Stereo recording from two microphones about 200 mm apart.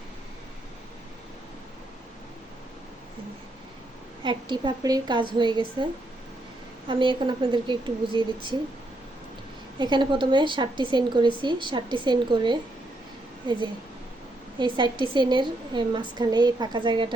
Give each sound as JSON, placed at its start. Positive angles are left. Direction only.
{"t": 4.2, "sound": "a woman's voice", "side_deg": -25}
{"t": 9.7, "sound": "a woman's voice", "side_deg": -20}
{"t": 14.6, "sound": "a woman's voice", "side_deg": -25}